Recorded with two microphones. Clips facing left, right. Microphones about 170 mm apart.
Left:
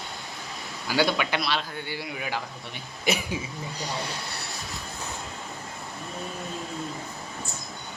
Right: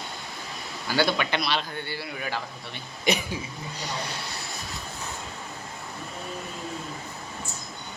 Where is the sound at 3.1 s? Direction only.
5° left (ahead or behind).